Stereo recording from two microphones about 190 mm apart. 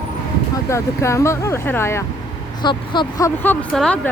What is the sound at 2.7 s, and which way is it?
Speech, 25° left (ahead or behind).